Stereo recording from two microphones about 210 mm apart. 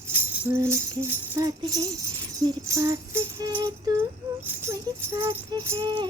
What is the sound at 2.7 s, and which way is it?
Music, 15° right (ahead or behind).